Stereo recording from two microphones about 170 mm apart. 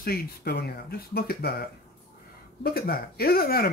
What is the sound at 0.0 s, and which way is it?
Speech, 65° left (ahead or behind).